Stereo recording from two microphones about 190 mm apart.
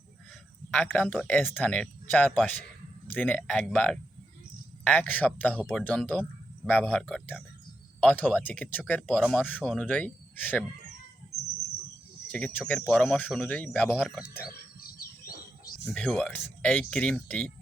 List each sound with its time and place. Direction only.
0.7 s speech: 5° left (ahead or behind)
12.3 s speech: 5° left (ahead or behind)
14.8 s bird: 50° left (ahead or behind)
15.8 s speech: 5° left (ahead or behind)